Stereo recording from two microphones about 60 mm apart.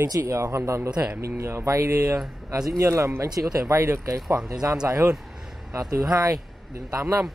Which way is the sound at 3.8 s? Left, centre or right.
Right.